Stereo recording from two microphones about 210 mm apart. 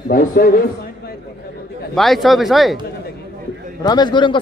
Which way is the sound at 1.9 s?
Centre (ahead or behind).